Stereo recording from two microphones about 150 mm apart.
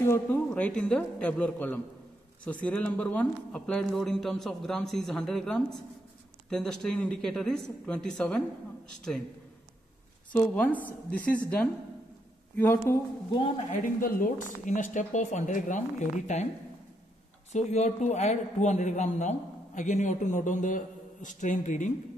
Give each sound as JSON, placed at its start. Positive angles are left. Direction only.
{"t": 0.0, "sound": "speech", "side_deg": 15}
{"t": 10.3, "sound": "speech", "side_deg": 10}
{"t": 12.5, "sound": "speech", "side_deg": 15}
{"t": 13.7, "sound": "speech", "side_deg": 65}
{"t": 17.5, "sound": "a man's voice", "side_deg": 50}